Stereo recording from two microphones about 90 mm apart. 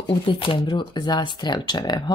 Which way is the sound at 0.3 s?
75° left (ahead or behind).